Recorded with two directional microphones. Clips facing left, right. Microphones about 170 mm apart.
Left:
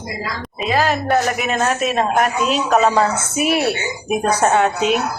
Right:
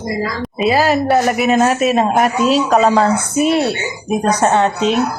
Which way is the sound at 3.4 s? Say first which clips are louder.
Right 2 dB; 25° right (ahead or behind).